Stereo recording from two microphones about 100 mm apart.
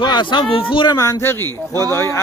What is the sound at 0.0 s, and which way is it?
Speech, 50° left (ahead or behind).